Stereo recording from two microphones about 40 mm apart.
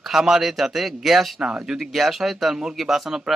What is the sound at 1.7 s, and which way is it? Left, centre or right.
Speech, centre.